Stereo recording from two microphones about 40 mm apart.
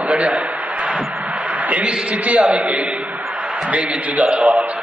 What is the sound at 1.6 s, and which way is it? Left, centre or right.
A man's voice, right.